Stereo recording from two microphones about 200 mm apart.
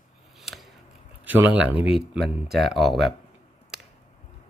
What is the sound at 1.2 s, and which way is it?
Speech, 10° right (ahead or behind).